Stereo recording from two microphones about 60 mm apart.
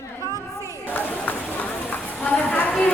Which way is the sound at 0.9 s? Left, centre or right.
Left.